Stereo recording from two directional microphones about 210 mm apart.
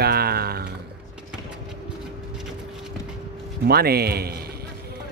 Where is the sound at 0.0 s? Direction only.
50° right (ahead or behind).